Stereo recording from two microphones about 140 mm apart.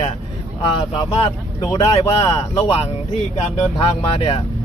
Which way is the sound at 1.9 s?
40° left (ahead or behind).